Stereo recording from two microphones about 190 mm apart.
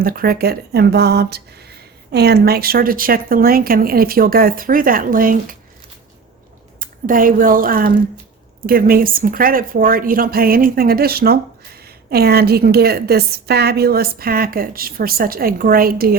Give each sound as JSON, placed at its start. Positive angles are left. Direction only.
{"t": 0.0, "sound": "a woman's voice", "side_deg": -50}
{"t": 6.7, "sound": "a woman's voice", "side_deg": -45}